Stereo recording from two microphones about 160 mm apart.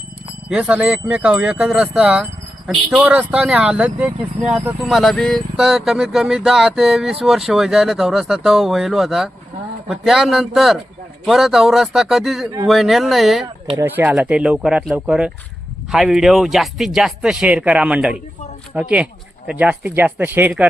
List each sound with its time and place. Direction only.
0.4 s speech: 5° right (ahead or behind)
13.7 s speech: 10° right (ahead or behind)